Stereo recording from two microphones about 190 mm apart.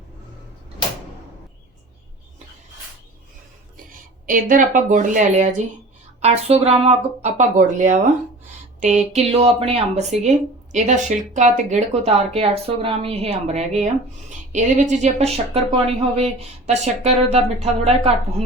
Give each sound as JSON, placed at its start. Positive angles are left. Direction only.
{"t": 4.3, "sound": "a woman's voice", "side_deg": -45}